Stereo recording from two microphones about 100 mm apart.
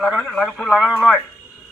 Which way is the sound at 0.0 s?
5° right (ahead or behind).